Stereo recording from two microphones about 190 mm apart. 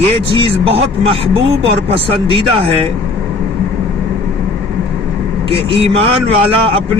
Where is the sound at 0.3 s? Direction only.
30° right (ahead or behind).